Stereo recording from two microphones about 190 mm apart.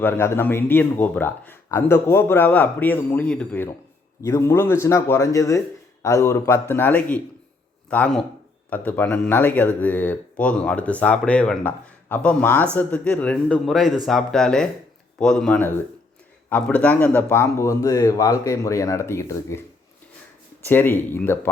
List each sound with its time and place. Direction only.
0.0 s speech: 10° left (ahead or behind)
20.7 s speech: 10° left (ahead or behind)